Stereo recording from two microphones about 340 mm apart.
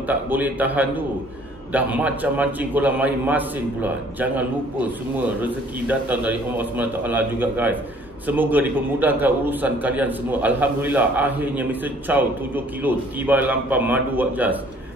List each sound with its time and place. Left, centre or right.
0.0 s a man's voice: centre